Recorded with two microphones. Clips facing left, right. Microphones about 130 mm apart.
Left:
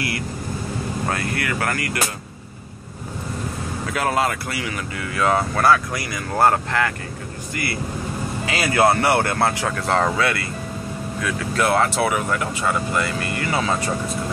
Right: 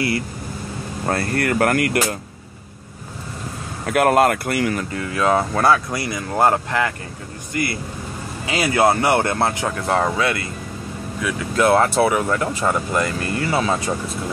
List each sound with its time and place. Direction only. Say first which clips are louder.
1.0 s speech: right 7 dB; 35° right (ahead or behind); by 2.1 s 55° right (ahead or behind)
3.8 s speech: right 7 dB; 60° right (ahead or behind)
4.9 s speech: even; 25° right (ahead or behind)
13.5 s speech: right 1 dB; 10° right (ahead or behind)